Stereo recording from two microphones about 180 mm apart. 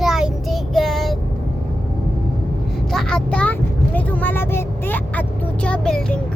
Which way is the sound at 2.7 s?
Centre (ahead or behind).